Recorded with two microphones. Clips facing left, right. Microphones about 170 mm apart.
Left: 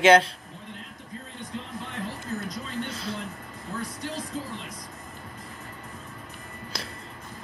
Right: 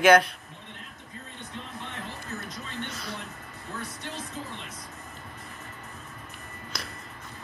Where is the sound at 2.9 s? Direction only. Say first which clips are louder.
Left 4 dB; 25° left (ahead or behind).